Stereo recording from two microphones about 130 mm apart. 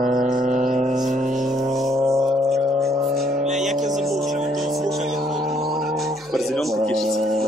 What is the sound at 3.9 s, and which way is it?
Music, centre (ahead or behind).